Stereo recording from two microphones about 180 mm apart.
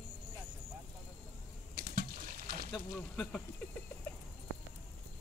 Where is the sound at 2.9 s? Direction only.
5° left (ahead or behind).